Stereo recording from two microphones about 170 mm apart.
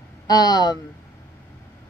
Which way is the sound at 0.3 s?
25° left (ahead or behind).